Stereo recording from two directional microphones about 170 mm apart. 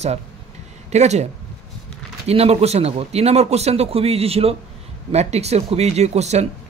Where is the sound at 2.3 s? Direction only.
35° right (ahead or behind).